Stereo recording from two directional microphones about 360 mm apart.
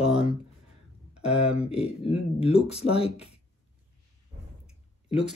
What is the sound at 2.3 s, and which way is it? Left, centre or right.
Speech, centre.